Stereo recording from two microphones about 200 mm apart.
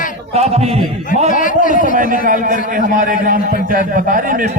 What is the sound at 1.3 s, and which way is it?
Speech, 40° left (ahead or behind).